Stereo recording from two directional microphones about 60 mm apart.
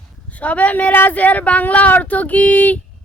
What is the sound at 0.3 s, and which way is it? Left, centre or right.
Speech, left.